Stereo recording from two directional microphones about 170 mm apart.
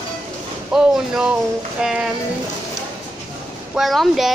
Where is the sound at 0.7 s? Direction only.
5° right (ahead or behind).